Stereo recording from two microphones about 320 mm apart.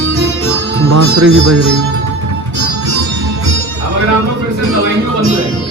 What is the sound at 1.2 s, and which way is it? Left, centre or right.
Speech, right.